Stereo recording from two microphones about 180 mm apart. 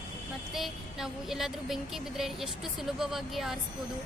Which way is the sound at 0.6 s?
Centre (ahead or behind).